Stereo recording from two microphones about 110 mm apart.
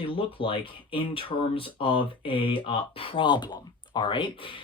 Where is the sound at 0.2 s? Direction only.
55° left (ahead or behind).